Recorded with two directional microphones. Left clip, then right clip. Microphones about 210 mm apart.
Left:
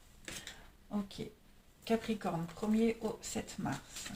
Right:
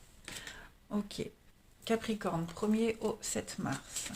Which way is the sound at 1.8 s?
35° right (ahead or behind).